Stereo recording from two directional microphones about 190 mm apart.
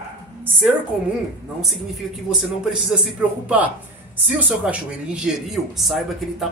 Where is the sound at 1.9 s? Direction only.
5° right (ahead or behind).